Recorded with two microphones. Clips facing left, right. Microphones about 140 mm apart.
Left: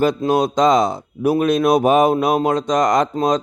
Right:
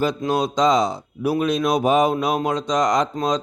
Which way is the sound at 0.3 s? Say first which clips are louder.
Left 2 dB; 50° left (ahead or behind).